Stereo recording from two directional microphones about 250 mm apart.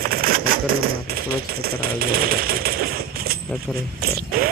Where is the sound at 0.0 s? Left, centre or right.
Right.